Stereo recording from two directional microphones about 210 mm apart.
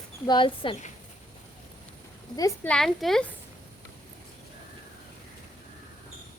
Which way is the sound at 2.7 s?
Centre (ahead or behind).